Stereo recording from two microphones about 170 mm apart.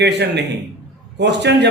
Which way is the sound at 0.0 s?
85° right.